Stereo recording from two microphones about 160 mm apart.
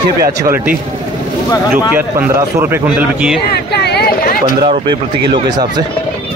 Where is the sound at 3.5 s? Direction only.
90° left; by 4.5 s 60° left (ahead or behind).